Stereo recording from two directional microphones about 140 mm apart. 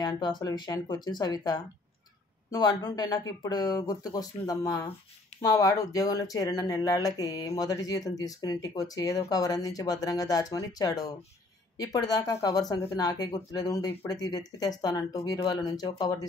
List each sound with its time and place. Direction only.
0.0 s speech: 30° left (ahead or behind)